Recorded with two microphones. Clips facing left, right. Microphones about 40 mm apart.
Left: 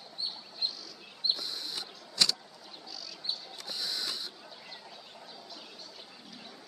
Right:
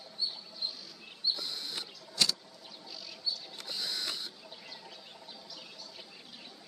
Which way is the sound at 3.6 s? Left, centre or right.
Right.